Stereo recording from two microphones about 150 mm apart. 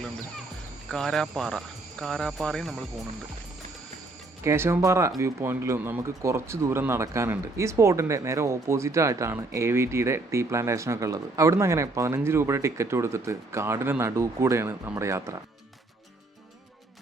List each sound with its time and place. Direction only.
0.9 s speech: 5° left (ahead or behind)
4.4 s speech: 15° right (ahead or behind)